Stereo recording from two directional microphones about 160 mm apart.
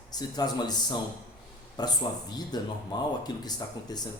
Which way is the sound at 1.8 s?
25° left (ahead or behind).